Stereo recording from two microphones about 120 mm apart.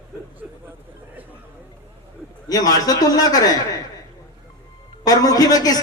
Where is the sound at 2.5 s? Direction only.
30° left (ahead or behind).